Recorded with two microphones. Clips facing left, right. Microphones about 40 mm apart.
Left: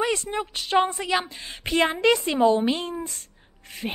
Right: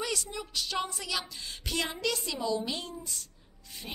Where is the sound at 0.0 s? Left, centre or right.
Left.